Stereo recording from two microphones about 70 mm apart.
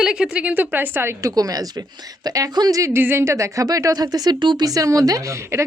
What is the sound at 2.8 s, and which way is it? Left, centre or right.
A woman's voice, right.